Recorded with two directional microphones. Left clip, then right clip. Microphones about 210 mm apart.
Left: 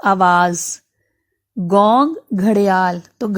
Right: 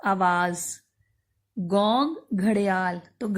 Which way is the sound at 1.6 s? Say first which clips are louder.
Left 10 dB; 40° left (ahead or behind).